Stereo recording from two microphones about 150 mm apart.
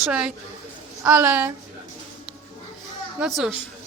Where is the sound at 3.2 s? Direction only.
Centre (ahead or behind).